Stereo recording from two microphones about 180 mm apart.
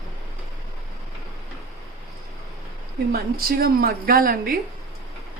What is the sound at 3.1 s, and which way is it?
A woman's voice, 55° right (ahead or behind).